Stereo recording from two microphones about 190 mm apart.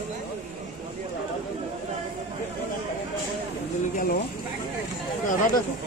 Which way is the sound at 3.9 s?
50° left (ahead or behind).